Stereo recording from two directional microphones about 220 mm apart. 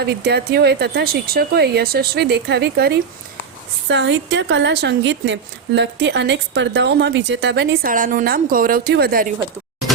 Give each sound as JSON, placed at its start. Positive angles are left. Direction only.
{"t": 0.0, "sound": "a woman's voice", "side_deg": -45}